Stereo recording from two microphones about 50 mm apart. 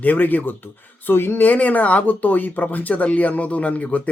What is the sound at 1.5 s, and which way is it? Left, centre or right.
Speech, left.